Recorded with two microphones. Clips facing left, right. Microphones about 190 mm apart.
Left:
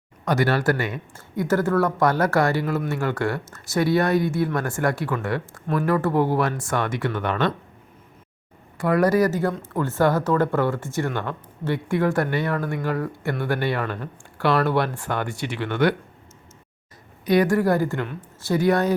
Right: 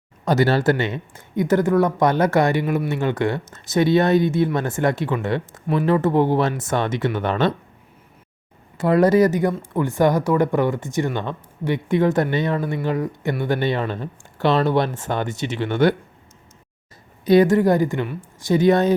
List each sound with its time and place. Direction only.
0.3 s speech: 25° right (ahead or behind)
8.8 s speech: 25° right (ahead or behind)
17.2 s speech: 25° right (ahead or behind)